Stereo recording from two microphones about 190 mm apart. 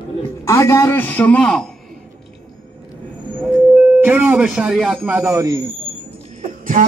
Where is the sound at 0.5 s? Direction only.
15° left (ahead or behind).